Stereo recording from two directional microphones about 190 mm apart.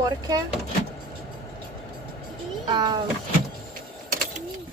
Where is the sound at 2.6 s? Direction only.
20° right (ahead or behind).